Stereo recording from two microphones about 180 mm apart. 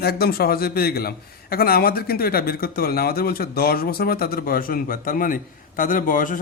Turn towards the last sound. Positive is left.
turn(degrees=50)  # may be behind; listen again after turning